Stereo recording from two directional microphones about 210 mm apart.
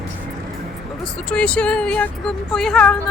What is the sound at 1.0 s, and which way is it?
Speech, 5° left (ahead or behind).